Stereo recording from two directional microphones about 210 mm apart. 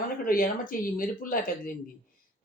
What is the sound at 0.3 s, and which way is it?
Speech, 40° left (ahead or behind).